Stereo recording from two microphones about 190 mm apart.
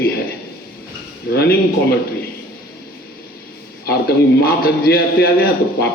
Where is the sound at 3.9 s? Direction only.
55° left (ahead or behind).